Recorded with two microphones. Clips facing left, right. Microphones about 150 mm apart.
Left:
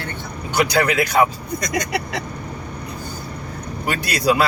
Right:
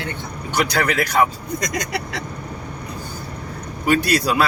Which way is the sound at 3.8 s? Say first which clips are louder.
Right 2 dB; centre (ahead or behind).